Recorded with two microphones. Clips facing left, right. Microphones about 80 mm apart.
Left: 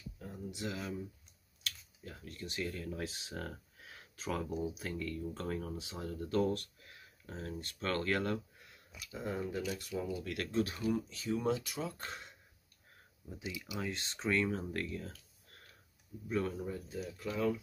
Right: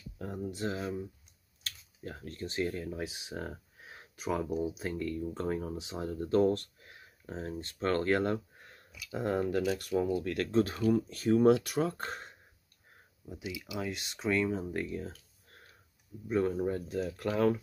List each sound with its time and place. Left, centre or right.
0.4 s speech: right
3.0 s speech: centre
8.5 s a sound: right
9.1 s speech: right
11.1 s speech: right
13.2 s speech: centre
14.9 s a sound: right
16.3 s speech: right
16.5 s speech: right